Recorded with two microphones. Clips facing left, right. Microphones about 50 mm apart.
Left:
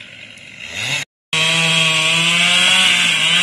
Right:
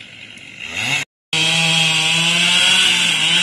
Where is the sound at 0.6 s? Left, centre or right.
Centre.